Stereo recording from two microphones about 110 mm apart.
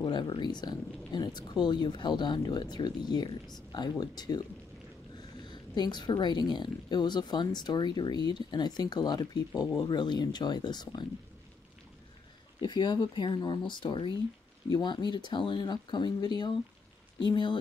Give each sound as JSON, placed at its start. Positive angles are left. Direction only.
{"t": 0.0, "sound": "speech", "side_deg": 40}
{"t": 12.5, "sound": "speech", "side_deg": 45}